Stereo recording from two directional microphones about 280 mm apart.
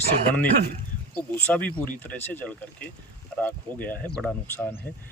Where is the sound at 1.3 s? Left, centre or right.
Centre.